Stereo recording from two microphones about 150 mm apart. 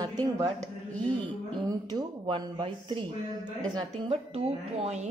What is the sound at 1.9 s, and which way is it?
A woman's voice, 30° right (ahead or behind).